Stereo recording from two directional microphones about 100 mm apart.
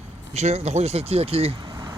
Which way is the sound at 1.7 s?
40° right (ahead or behind).